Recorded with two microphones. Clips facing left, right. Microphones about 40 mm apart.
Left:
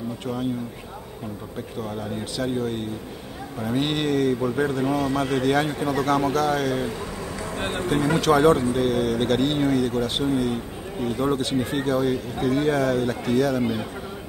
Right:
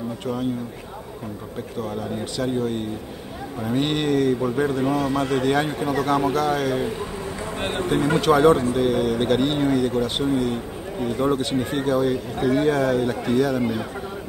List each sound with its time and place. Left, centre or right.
1.8 s speech: centre
7.5 s a man's voice: right
8.2 s speech: centre